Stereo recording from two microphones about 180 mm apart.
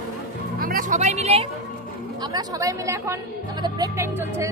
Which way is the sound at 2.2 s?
20° right (ahead or behind).